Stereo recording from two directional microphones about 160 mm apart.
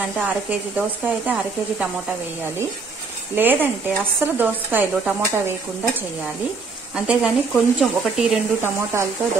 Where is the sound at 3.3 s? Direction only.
10° right (ahead or behind).